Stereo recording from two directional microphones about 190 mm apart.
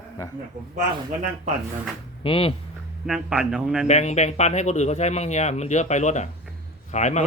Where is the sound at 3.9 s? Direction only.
35° left (ahead or behind).